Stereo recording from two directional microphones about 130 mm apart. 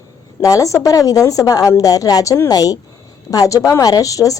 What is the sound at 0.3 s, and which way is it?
A woman's voice, 25° left (ahead or behind).